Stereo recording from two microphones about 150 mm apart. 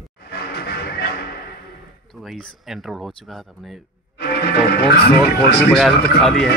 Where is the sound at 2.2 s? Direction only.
Centre (ahead or behind).